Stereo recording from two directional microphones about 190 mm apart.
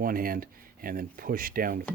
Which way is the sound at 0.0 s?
50° right (ahead or behind).